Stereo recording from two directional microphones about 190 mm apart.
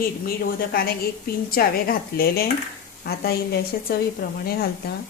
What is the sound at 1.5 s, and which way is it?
A woman's voice, 50° left (ahead or behind).